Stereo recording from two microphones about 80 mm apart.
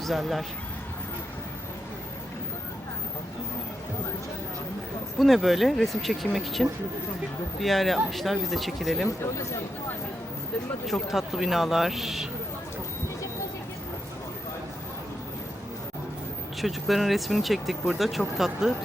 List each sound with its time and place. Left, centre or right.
0.0 s speech: centre
5.2 s speech: centre
9.0 s speech: left
10.8 s speech: centre
16.6 s speech: centre